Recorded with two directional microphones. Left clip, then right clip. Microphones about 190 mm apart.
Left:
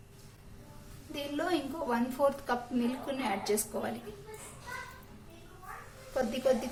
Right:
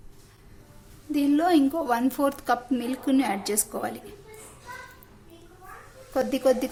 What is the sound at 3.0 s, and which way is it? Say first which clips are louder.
Speech: right 7 dB; 55° right (ahead or behind).